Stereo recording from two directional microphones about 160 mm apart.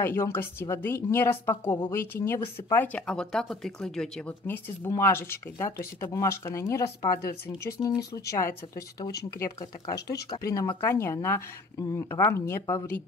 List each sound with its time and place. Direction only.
0.0 s speech: 15° left (ahead or behind)
9.9 s speech: 90° left
10.4 s speech: 20° left (ahead or behind)